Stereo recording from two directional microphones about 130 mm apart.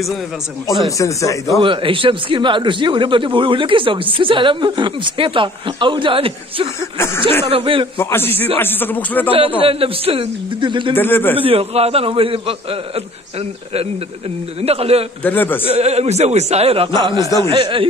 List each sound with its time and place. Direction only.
0.8 s speech: 25° left (ahead or behind)
1.6 s a man's voice: 40° right (ahead or behind)
6.8 s speech: 20° left (ahead or behind)
7.5 s a man's voice: 45° right (ahead or behind)
8.0 s speech: 15° left (ahead or behind)
9.6 s a man's voice: 45° right (ahead or behind)
11.0 s speech: 15° left (ahead or behind)
11.3 s a man's voice: 45° right (ahead or behind)
15.2 s speech: 15° left (ahead or behind)
15.6 s a man's voice: 55° right (ahead or behind)